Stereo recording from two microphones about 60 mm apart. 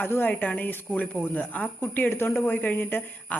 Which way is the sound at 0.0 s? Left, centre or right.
Left.